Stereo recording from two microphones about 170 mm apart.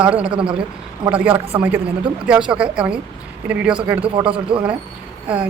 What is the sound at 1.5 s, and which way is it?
Speech, 25° right (ahead or behind).